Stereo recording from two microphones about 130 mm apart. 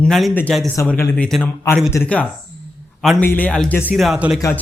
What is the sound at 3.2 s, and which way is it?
A man's voice, 15° left (ahead or behind).